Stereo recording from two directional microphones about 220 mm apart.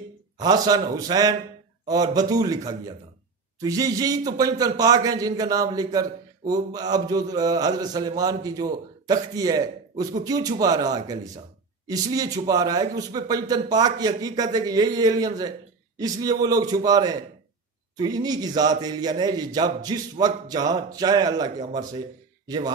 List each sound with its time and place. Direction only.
0.4 s speech: 15° right (ahead or behind)